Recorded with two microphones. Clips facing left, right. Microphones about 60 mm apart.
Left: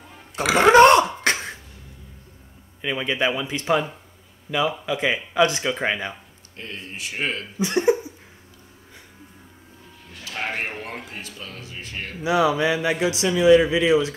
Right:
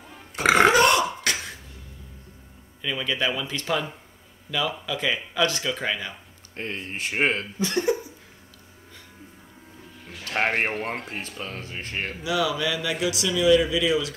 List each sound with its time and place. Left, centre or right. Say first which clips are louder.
0.4 s speech: right 1 dB; right
0.7 s throat clearing: left 6 dB; left
2.8 s speech: left 3 dB; left
6.5 s speech: right 3 dB; right
7.5 s cough: left 4 dB; left
10.2 s speech: right 4 dB; right
11.1 s speech: right 3 dB; right
12.2 s speech: left 6 dB; left